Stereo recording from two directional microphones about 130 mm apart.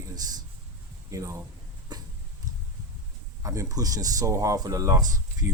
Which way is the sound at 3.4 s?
25° right (ahead or behind).